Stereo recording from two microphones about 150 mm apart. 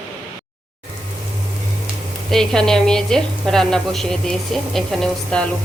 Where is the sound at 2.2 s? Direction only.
5° left (ahead or behind).